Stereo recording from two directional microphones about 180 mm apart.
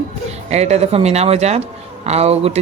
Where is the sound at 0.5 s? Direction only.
35° right (ahead or behind).